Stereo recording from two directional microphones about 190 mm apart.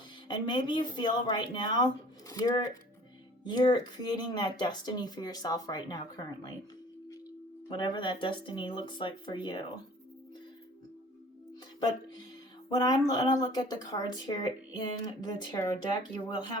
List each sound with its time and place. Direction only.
0.3 s speech: 25° left (ahead or behind)
7.7 s speech: 25° left (ahead or behind)
12.6 s speech: 20° left (ahead or behind)